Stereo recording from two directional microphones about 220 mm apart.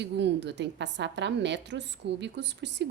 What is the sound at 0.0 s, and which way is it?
A woman's voice, 50° right (ahead or behind).